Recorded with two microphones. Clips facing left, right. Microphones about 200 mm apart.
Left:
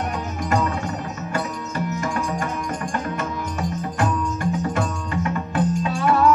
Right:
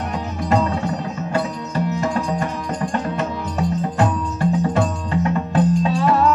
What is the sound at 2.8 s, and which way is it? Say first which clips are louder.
Music: right 4 dB; 30° right (ahead or behind).